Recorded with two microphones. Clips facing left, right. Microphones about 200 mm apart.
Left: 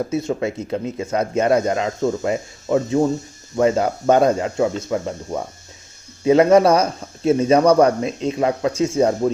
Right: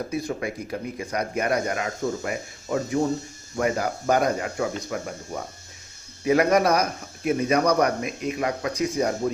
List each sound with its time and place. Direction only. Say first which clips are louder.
0.1 s speech: left 6 dB; 25° left (ahead or behind)
6.2 s speech: left 7 dB; 25° left (ahead or behind)